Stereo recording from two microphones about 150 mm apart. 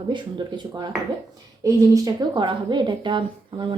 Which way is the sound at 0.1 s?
30° right (ahead or behind).